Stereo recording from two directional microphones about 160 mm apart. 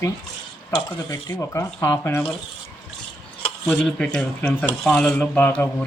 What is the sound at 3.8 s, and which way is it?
Speech, 5° left (ahead or behind).